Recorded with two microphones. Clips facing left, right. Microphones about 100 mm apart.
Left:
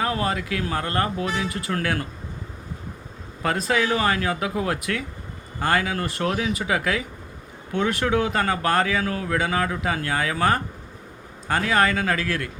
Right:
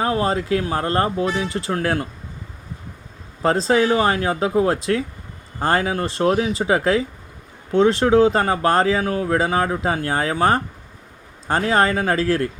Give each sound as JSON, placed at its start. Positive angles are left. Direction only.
{"t": 0.0, "sound": "speech", "side_deg": -30}
{"t": 3.4, "sound": "speech", "side_deg": -30}